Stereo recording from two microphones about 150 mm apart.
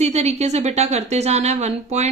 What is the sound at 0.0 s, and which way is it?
A woman's voice, 45° right (ahead or behind).